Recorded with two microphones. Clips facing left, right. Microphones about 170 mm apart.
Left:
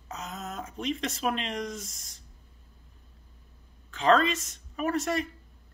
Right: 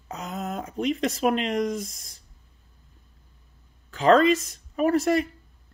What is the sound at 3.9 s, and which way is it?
Speech, 35° right (ahead or behind).